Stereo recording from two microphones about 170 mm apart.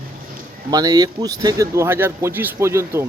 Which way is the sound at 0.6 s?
20° right (ahead or behind).